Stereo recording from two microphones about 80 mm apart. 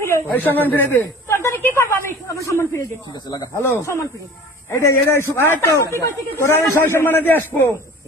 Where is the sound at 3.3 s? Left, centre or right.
Left.